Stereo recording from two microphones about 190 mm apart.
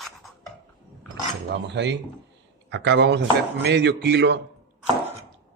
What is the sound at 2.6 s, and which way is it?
Speech, 65° right (ahead or behind).